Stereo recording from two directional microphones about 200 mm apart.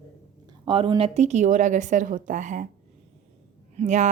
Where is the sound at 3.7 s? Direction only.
35° right (ahead or behind).